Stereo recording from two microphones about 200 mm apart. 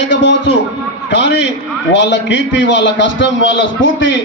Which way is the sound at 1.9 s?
60° left (ahead or behind).